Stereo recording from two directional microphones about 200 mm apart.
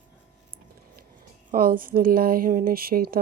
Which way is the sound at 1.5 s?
45° right (ahead or behind).